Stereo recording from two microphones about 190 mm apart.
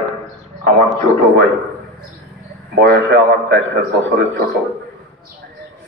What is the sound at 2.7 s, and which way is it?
A man's voice, 60° right (ahead or behind).